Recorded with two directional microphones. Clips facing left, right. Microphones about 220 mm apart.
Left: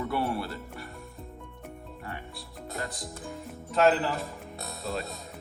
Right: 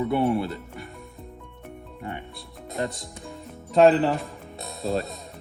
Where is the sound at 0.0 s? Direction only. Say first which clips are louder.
Right 7 dB; 20° right (ahead or behind).